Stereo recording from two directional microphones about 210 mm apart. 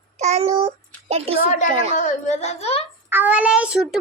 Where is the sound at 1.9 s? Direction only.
35° left (ahead or behind).